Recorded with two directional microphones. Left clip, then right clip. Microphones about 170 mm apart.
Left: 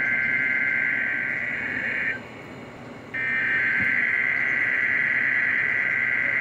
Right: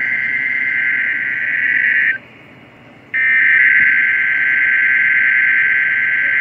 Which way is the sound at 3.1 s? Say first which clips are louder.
Right 12 dB; 60° right (ahead or behind).